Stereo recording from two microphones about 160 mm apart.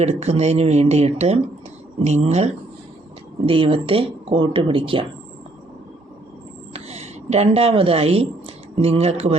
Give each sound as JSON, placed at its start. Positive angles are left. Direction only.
{"t": 0.0, "sound": "a woman's voice", "side_deg": -45}
{"t": 6.7, "sound": "a woman's voice", "side_deg": -40}